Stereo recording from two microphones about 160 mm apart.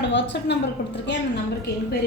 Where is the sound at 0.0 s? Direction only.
90° left.